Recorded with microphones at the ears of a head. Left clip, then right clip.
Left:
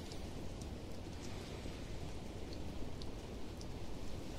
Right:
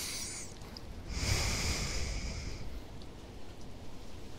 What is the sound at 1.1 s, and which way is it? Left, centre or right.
Snort, right.